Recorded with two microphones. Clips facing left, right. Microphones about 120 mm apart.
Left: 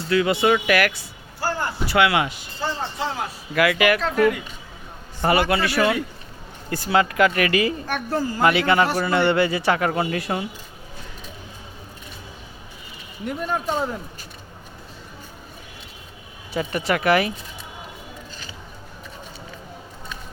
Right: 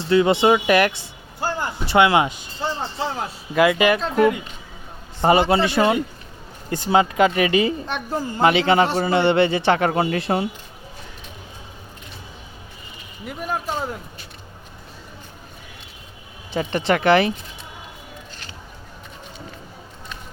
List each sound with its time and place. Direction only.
0.0 s a woman's voice: 25° right (ahead or behind)
13.2 s a man's voice: 5° right (ahead or behind)
16.6 s a woman's voice: 30° right (ahead or behind)